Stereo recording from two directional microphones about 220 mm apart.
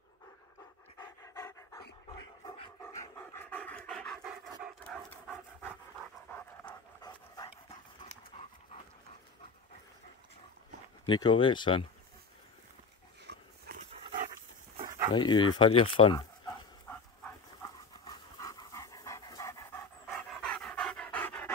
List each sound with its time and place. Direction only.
0.9 s pant: 15° left (ahead or behind)
4.2 s dog: 5° right (ahead or behind)
4.8 s dog: 10° left (ahead or behind)
6.3 s pant: 10° left (ahead or behind)
11.1 s speech: 20° left (ahead or behind)
13.3 s dog: 40° right (ahead or behind)
15.1 s speech: 20° left (ahead or behind)
16.9 s dog: 15° left (ahead or behind)
20.2 s pant: 5° left (ahead or behind)